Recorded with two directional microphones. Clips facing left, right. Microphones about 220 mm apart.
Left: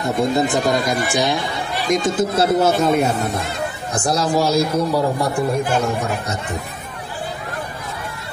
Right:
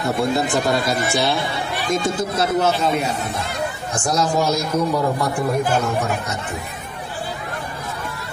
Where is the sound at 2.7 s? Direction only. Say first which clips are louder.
Left 4 dB; 50° left (ahead or behind).